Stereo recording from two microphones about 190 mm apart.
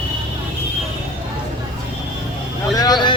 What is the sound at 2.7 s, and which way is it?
Speech, 20° left (ahead or behind).